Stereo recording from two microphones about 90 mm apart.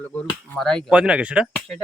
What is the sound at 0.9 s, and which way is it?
Speech, 10° right (ahead or behind).